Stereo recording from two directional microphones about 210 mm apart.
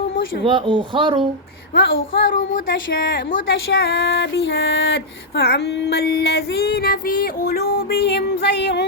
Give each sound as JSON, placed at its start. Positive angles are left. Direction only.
{"t": 0.4, "sound": "speech", "side_deg": -25}
{"t": 1.7, "sound": "speech", "side_deg": 65}
{"t": 2.9, "sound": "female singing", "side_deg": 60}